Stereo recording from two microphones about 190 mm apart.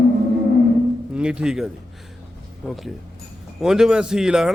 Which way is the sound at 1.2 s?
5° right (ahead or behind).